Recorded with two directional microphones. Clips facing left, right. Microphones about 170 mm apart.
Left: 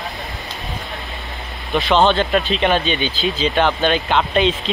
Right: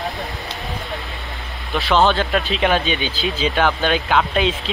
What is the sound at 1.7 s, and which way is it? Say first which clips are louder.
Speech: left 2 dB; 5° right (ahead or behind).